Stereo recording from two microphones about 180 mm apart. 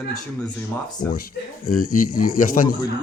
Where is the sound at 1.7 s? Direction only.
50° left (ahead or behind).